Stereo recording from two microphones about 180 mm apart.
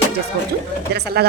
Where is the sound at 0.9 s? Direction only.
60° right (ahead or behind).